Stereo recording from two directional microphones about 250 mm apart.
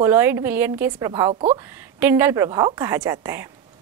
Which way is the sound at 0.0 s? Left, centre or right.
Centre.